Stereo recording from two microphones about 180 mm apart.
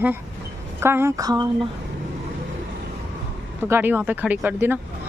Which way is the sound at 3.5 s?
15° right (ahead or behind).